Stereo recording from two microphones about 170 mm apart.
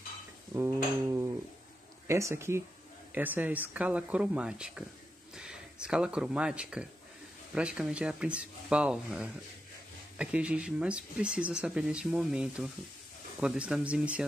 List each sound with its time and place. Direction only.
0.6 s speech: 15° right (ahead or behind)